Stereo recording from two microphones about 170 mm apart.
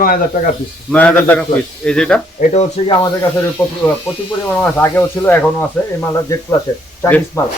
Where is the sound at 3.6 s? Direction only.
10° left (ahead or behind).